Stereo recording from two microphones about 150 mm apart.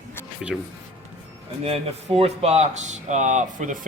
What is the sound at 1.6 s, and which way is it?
Speech, 40° right (ahead or behind).